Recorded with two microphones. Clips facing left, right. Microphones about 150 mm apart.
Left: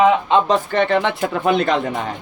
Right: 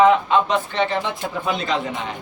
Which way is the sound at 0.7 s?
55° left (ahead or behind).